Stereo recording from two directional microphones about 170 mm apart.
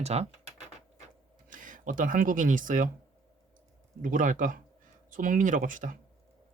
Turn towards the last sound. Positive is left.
turn(degrees=-50)  # may be behind; listen again after turning